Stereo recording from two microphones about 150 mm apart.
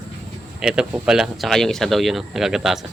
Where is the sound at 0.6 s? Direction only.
5° right (ahead or behind).